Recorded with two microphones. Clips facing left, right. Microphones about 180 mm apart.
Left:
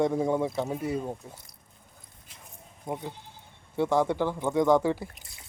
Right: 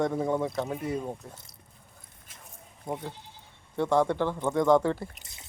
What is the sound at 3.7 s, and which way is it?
Speech, 5° left (ahead or behind).